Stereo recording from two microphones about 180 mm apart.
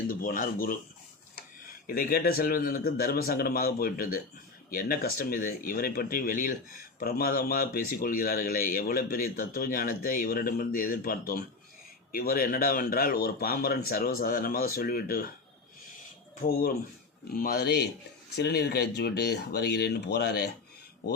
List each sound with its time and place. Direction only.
0.1 s speech: 50° left (ahead or behind)
1.9 s speech: 55° left (ahead or behind)
16.4 s speech: 55° left (ahead or behind)